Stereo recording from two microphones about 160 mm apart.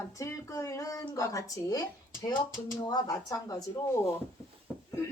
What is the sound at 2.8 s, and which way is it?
Speech, 25° left (ahead or behind).